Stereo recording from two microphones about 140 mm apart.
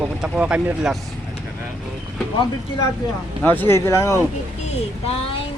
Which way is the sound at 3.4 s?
15° left (ahead or behind).